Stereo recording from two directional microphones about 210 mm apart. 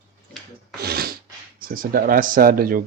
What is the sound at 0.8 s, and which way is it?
Rub, 50° right (ahead or behind).